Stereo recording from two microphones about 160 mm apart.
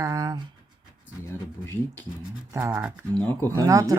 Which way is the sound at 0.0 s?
20° right (ahead or behind).